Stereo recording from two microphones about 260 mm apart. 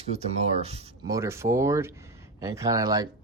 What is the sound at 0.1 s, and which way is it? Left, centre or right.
Speech, right.